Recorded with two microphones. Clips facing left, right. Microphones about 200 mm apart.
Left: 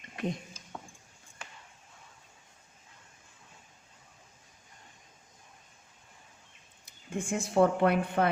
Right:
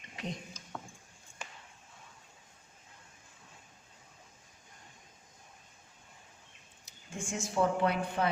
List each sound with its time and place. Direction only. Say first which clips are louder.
0.2 s speech: left 7 dB; 55° left (ahead or behind)
0.7 s a sound: even; 15° left (ahead or behind)
6.8 s speech: left 7 dB; 60° left (ahead or behind)